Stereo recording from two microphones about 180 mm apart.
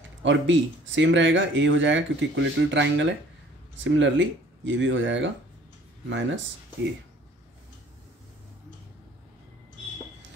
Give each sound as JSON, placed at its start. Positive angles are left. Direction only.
{"t": 0.2, "sound": "speech", "side_deg": -90}